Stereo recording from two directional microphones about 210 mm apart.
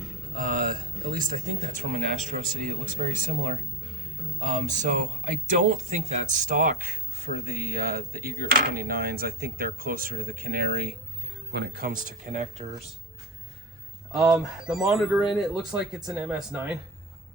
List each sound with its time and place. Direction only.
0.7 s speech: 40° right (ahead or behind)
14.1 s speech: 5° right (ahead or behind)